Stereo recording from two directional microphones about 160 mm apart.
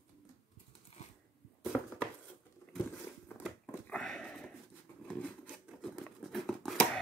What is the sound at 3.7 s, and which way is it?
Sniff, 5° left (ahead or behind).